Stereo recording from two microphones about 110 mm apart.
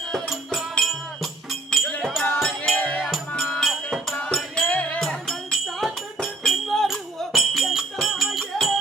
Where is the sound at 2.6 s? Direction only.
10° left (ahead or behind).